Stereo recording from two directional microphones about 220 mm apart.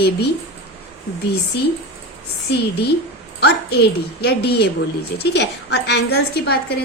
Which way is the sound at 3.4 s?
50° left (ahead or behind).